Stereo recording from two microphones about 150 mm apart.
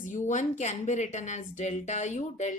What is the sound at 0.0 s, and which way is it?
Speech, 55° left (ahead or behind).